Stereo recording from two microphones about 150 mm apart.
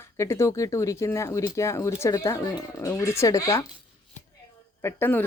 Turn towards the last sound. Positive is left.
turn(degrees=15)  # may be behind; listen again after turning